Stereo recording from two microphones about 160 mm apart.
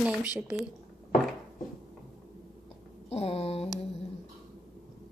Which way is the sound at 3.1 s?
40° left (ahead or behind).